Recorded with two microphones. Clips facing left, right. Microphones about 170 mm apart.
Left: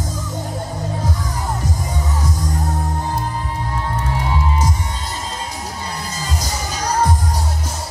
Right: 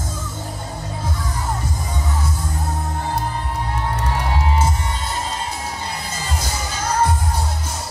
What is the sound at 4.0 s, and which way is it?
Music, 70° right (ahead or behind).